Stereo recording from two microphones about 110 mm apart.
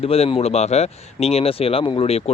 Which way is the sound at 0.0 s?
60° left (ahead or behind).